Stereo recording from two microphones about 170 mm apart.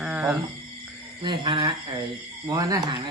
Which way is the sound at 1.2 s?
30° right (ahead or behind).